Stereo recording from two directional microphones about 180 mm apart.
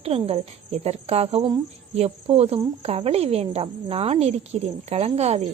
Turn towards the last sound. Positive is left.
turn(degrees=-35)  # may be behind; listen again after turning